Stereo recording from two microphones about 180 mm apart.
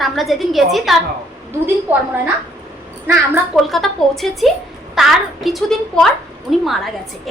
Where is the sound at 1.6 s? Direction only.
10° right (ahead or behind).